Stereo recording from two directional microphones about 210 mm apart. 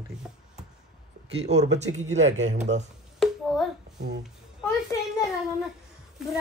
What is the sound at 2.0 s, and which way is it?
Speech, 65° right (ahead or behind).